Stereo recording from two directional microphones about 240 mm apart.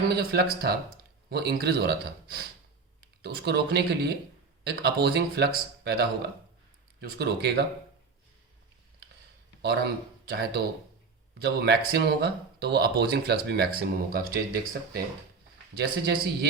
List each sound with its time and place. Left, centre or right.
0.1 s speech: right
9.6 s speech: right